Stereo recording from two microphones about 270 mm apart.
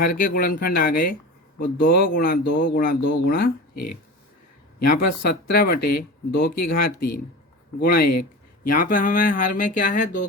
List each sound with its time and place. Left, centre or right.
0.0 s speech: left
4.9 s speech: left